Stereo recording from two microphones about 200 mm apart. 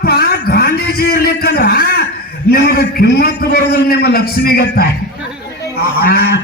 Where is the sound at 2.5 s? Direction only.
50° left (ahead or behind).